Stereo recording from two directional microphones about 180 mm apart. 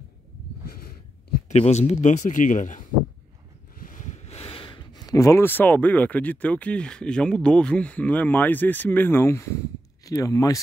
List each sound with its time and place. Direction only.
1.5 s a man's voice: 40° left (ahead or behind)
3.8 s speech: 45° left (ahead or behind); by 10.6 s 20° left (ahead or behind)